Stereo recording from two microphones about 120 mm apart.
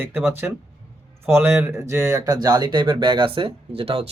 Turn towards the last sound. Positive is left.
turn(degrees=-50)  # may be behind; listen again after turning